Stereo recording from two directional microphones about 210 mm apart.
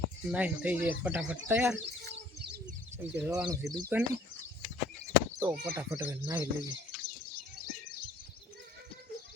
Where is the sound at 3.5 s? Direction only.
15° right (ahead or behind).